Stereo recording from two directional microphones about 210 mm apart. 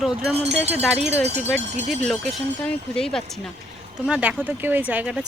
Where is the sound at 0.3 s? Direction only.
30° right (ahead or behind).